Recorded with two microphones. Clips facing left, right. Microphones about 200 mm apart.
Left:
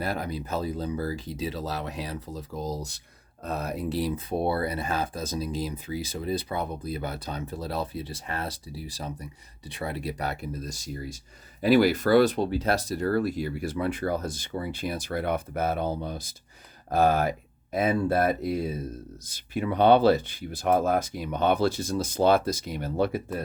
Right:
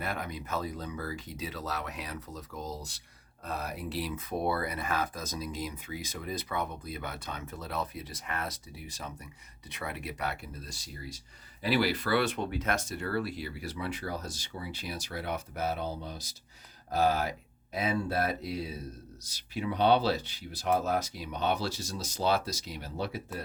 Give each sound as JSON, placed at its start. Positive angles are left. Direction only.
{"t": 0.0, "sound": "speech", "side_deg": 35}